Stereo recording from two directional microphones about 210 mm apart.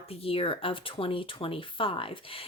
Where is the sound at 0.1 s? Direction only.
25° left (ahead or behind).